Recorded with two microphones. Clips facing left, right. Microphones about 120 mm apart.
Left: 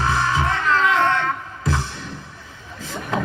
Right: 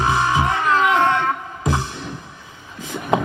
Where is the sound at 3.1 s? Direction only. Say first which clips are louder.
Right 5 dB; 20° right (ahead or behind).